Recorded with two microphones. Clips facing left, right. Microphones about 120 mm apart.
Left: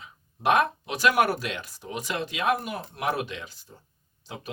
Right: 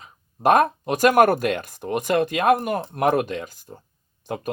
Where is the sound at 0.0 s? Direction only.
45° right (ahead or behind).